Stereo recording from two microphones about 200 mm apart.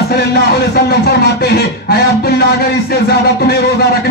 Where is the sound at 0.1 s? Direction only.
50° left (ahead or behind).